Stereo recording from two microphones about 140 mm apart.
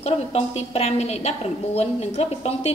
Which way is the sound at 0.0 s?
50° left (ahead or behind).